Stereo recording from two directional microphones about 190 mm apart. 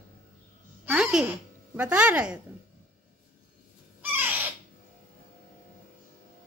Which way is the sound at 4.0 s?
10° right (ahead or behind).